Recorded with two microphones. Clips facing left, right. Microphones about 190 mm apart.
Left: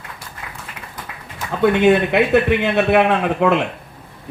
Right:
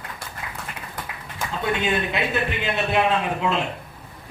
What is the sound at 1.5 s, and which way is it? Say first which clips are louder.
A man's voice: left 11 dB; 65° left (ahead or behind).